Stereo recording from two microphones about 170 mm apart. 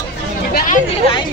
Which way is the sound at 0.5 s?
50° left (ahead or behind).